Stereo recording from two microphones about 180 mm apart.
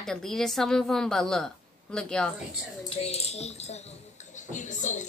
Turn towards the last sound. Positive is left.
turn(degrees=45)  # may be behind; listen again after turning